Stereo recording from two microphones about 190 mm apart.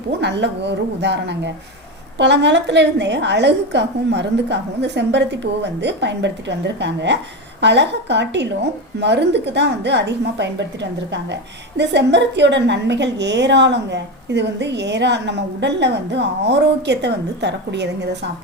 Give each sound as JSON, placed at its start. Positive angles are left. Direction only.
{"t": 0.2, "sound": "a woman's voice", "side_deg": -65}
{"t": 11.8, "sound": "a woman's voice", "side_deg": -65}